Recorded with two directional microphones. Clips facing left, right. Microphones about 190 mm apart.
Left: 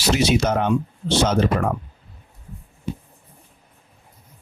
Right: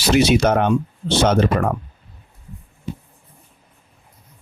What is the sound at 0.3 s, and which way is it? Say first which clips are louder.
Speech: right 4 dB; 60° right (ahead or behind).